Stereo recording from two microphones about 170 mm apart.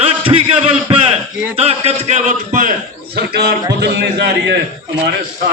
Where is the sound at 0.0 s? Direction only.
35° right (ahead or behind).